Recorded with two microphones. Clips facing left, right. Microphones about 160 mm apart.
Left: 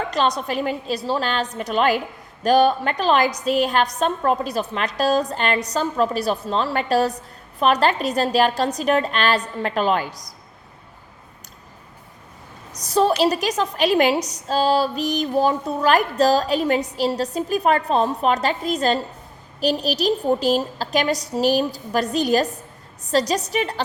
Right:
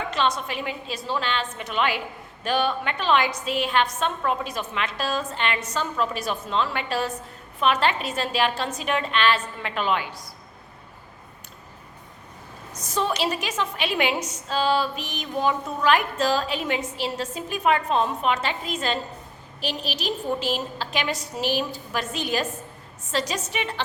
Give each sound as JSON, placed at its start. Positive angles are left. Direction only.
{"t": 0.1, "sound": "a woman's voice", "side_deg": 40}
{"t": 12.7, "sound": "a woman's voice", "side_deg": 35}